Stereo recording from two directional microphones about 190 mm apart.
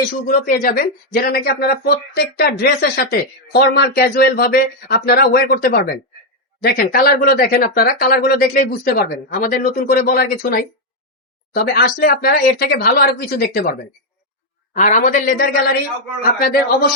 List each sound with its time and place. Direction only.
0.3 s a woman's voice: 45° left (ahead or behind)
14.7 s a woman's voice: 40° left (ahead or behind)